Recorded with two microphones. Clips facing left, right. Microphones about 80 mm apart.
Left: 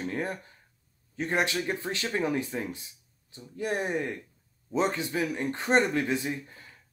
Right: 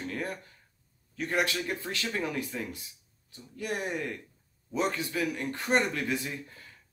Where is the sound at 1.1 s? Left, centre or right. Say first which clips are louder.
Left 2 dB; left.